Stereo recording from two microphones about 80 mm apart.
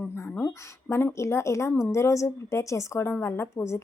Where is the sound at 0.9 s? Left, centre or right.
Left.